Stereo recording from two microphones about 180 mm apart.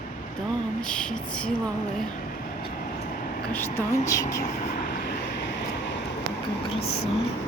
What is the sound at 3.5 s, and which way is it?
Speech, 15° left (ahead or behind).